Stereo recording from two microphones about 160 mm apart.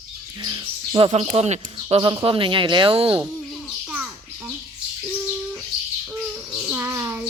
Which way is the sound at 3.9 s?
10° right (ahead or behind).